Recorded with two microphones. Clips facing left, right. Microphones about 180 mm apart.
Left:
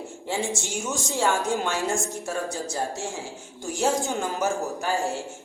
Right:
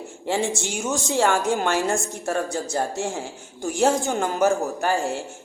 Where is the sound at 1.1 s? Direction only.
70° right (ahead or behind).